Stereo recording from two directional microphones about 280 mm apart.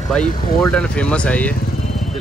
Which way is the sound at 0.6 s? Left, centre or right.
Centre.